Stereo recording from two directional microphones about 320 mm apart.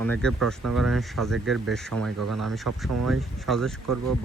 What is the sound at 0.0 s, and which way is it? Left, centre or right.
Speech, centre.